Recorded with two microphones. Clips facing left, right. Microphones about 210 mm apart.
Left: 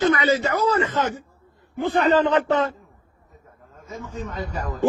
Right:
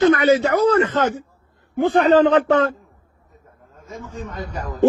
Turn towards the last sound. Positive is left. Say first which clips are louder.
# even
turn(degrees=0)  # may be behind; listen again after turning